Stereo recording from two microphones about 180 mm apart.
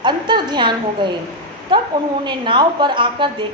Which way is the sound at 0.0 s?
25° right (ahead or behind).